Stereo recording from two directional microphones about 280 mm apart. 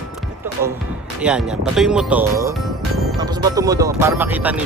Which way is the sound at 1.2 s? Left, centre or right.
Centre.